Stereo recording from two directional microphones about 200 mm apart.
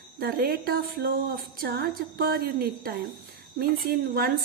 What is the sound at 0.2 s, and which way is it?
Speech, 50° right (ahead or behind).